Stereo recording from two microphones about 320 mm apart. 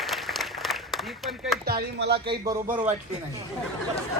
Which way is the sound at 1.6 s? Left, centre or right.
Right.